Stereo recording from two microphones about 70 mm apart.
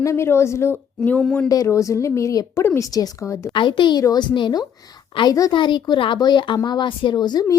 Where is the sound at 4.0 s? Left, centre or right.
Left.